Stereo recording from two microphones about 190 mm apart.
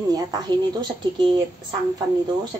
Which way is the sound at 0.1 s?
20° right (ahead or behind).